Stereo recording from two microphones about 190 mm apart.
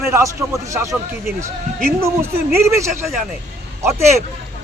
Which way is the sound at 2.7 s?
15° right (ahead or behind).